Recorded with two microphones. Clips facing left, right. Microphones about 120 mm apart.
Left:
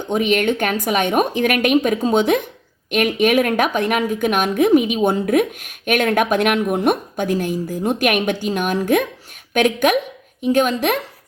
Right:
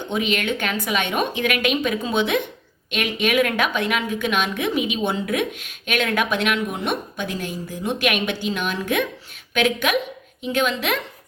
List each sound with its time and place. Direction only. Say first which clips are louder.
0.1 s a woman's voice: left 6 dB; 50° left (ahead or behind)